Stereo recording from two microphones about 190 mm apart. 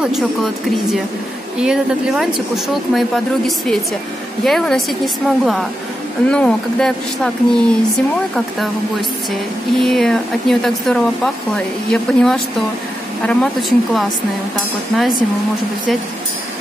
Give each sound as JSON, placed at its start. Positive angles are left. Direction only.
{"t": 0.0, "sound": "speech", "side_deg": 0}
{"t": 1.6, "sound": "speech", "side_deg": -5}
{"t": 9.8, "sound": "speech", "side_deg": 0}